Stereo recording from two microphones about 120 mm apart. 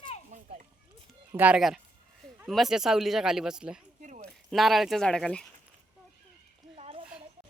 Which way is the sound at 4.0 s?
90° right.